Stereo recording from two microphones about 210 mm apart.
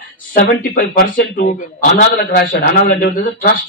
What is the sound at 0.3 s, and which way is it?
A man's voice, 40° left (ahead or behind).